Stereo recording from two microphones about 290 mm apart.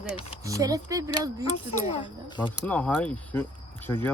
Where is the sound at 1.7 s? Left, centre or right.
Centre.